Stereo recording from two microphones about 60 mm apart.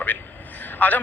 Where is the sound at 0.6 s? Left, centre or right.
Left.